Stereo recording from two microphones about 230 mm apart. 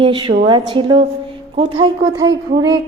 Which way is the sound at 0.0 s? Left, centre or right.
Centre.